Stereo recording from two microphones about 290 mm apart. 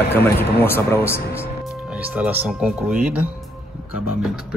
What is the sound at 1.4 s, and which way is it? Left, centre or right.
Speech, centre.